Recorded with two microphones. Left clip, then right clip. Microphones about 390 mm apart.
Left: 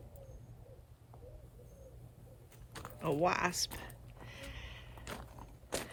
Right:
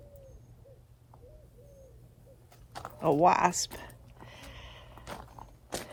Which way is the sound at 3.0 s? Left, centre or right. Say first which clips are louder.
Right 9 dB; centre.